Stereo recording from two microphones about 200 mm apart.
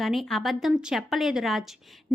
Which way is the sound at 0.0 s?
Centre (ahead or behind).